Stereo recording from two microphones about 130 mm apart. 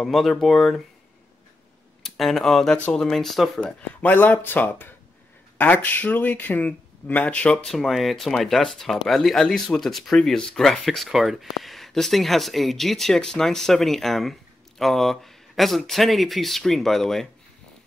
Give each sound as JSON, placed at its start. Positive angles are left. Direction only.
{"t": 0.0, "sound": "speech", "side_deg": 0}
{"t": 2.0, "sound": "speech", "side_deg": 0}
{"t": 4.0, "sound": "speech", "side_deg": 15}